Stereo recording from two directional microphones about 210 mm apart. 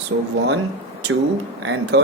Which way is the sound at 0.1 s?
60° right (ahead or behind).